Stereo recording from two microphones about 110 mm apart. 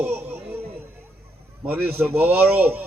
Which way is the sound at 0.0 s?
20° right (ahead or behind).